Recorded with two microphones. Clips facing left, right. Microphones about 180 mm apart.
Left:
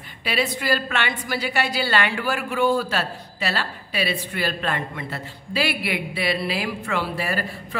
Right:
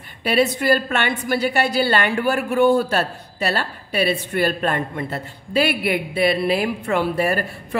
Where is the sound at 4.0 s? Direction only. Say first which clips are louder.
Right 6 dB; 50° right (ahead or behind).